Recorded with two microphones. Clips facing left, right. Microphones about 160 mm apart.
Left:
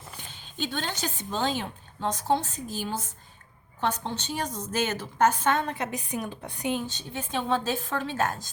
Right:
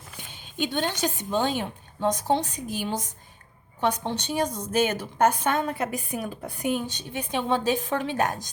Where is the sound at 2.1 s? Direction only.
15° right (ahead or behind).